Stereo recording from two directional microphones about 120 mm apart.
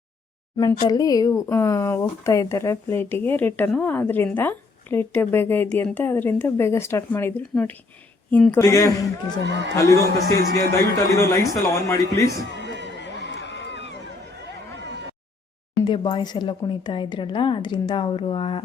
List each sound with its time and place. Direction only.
0.5 s a woman's voice: 30° left (ahead or behind); by 8.6 s 10° left (ahead or behind)
8.6 s speech: 30° left (ahead or behind)
15.8 s a woman's voice: 40° left (ahead or behind)